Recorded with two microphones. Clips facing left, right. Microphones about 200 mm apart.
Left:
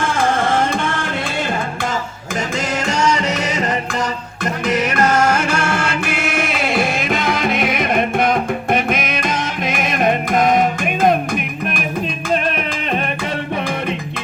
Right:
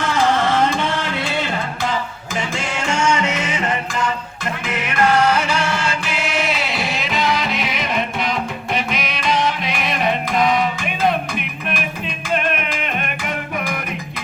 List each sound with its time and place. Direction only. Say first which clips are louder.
0.0 s music: even; 50° left (ahead or behind)
2.7 s music: left 1 dB; 40° left (ahead or behind)
12.3 s music: left 1 dB; 35° left (ahead or behind)